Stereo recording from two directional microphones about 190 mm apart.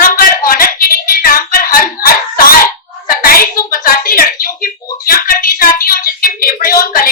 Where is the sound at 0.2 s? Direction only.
50° left (ahead or behind).